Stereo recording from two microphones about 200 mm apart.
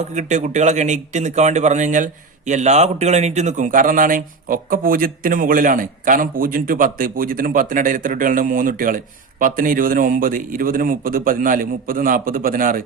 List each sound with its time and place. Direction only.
0.0 s a man's voice: 35° right (ahead or behind)